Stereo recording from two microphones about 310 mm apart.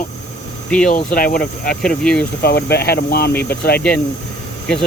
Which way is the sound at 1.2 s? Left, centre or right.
Left.